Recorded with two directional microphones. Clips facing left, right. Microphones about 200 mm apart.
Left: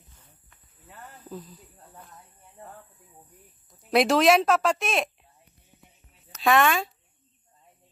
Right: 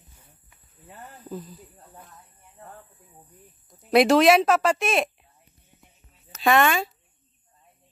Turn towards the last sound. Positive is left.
turn(degrees=0)  # may be behind; listen again after turning